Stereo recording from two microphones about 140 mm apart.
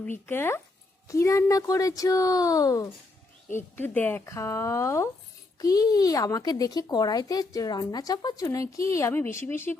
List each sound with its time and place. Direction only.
0.3 s speech: 15° left (ahead or behind)
3.5 s speech: 15° left (ahead or behind)